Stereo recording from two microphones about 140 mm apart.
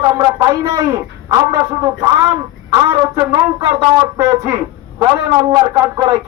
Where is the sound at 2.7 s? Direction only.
25° right (ahead or behind).